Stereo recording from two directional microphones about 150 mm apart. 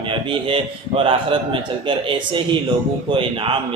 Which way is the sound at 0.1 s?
35° right (ahead or behind).